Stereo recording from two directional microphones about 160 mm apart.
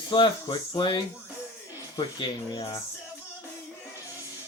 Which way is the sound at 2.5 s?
20° left (ahead or behind).